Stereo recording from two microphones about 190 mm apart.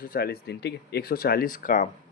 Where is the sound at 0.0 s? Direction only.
50° left (ahead or behind).